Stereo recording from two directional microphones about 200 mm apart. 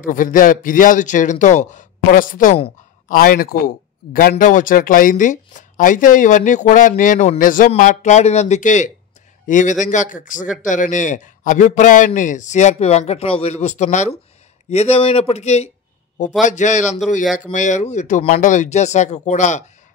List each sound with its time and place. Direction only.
0.0 s speech: 40° left (ahead or behind)
3.1 s speech: 45° left (ahead or behind)